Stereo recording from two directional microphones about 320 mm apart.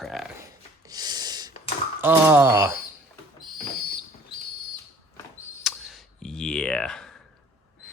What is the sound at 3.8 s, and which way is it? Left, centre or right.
Whistle, left.